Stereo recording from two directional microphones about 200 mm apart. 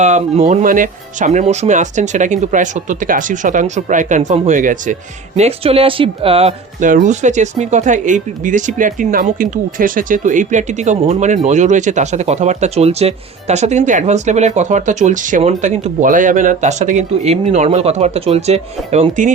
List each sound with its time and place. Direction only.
0.0 s speech: 35° right (ahead or behind)
5.4 s speech: 30° right (ahead or behind)